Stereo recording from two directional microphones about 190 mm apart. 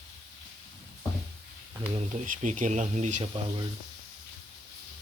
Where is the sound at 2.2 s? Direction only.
40° right (ahead or behind).